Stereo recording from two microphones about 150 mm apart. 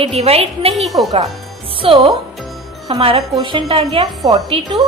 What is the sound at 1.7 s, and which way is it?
A woman's voice, 35° right (ahead or behind).